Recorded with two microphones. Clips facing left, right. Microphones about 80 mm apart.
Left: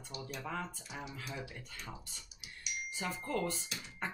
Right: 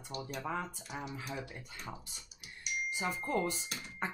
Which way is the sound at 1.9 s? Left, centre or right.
Centre.